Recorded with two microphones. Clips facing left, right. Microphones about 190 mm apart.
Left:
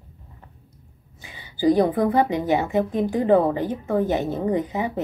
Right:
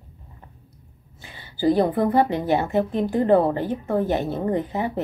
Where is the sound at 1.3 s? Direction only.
15° left (ahead or behind).